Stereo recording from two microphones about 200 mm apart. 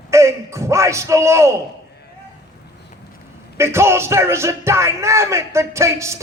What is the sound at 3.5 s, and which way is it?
Speech, 15° right (ahead or behind).